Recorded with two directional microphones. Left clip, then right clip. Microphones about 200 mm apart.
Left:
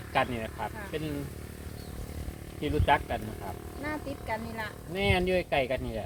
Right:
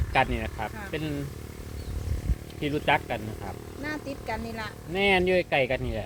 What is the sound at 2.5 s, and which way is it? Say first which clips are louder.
Speech: right 1 dB; 50° right (ahead or behind).